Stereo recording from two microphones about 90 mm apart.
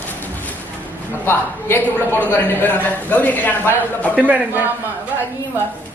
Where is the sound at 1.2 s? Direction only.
25° left (ahead or behind).